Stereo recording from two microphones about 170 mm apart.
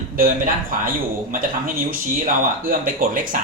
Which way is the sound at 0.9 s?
55° right (ahead or behind).